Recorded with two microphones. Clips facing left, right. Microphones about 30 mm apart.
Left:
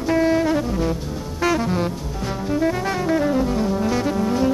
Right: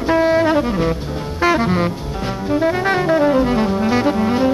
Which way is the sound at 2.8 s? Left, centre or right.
Right.